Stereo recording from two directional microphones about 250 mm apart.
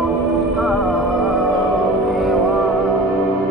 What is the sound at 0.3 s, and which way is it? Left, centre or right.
Music, centre.